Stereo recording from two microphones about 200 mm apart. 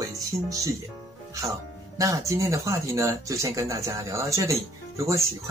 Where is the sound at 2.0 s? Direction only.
15° right (ahead or behind).